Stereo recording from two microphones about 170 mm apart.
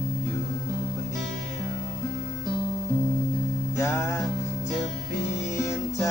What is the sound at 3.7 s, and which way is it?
Music, 15° left (ahead or behind).